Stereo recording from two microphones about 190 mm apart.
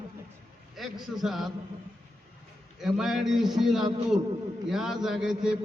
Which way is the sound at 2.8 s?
Centre (ahead or behind).